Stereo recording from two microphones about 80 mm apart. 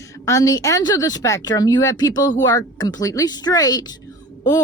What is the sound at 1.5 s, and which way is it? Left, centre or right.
Speech, left.